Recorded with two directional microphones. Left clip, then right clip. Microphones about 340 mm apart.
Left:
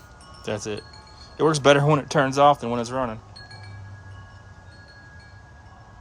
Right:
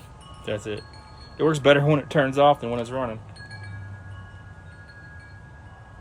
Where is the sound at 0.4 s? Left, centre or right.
Centre.